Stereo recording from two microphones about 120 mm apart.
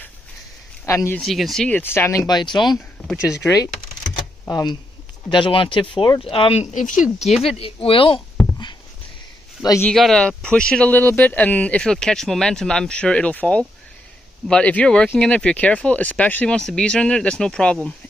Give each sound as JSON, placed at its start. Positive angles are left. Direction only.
{"t": 0.8, "sound": "speech", "side_deg": 25}
{"t": 1.2, "sound": "speech", "side_deg": 0}
{"t": 1.8, "sound": "speech", "side_deg": 20}
{"t": 2.2, "sound": "speech", "side_deg": 40}
{"t": 3.2, "sound": "speech", "side_deg": 25}
{"t": 6.6, "sound": "speech", "side_deg": 90}
{"t": 7.5, "sound": "speech", "side_deg": 50}
{"t": 9.9, "sound": "speech", "side_deg": 5}